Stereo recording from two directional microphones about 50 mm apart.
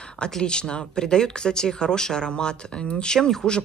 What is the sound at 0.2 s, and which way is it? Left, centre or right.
Speech, centre.